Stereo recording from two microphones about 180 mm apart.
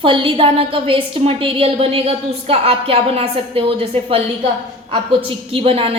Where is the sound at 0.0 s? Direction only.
30° right (ahead or behind).